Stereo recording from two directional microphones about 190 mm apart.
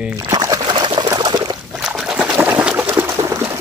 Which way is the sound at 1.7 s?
5° right (ahead or behind).